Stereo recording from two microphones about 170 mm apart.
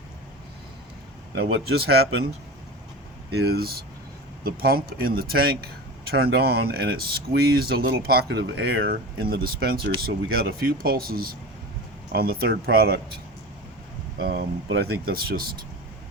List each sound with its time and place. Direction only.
1.4 s speech: 70° right (ahead or behind)
3.3 s speech: 70° right (ahead or behind)
14.2 s speech: 65° right (ahead or behind)